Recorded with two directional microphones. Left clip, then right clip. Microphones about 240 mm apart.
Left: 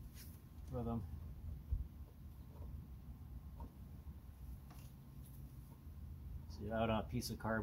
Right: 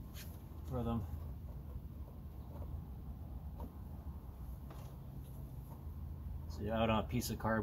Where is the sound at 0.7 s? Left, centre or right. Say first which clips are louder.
Right 4 dB; centre.